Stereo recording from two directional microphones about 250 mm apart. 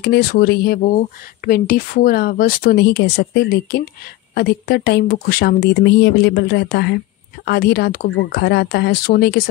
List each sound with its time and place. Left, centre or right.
0.0 s speech: left